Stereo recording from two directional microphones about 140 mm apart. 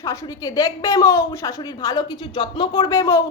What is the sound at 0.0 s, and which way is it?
A woman's voice, 25° left (ahead or behind).